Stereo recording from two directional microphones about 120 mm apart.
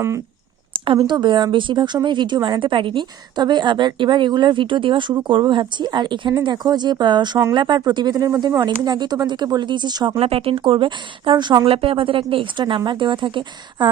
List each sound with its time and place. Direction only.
1.0 s a woman's voice: 40° right (ahead or behind)
10.2 s speech: 55° right (ahead or behind)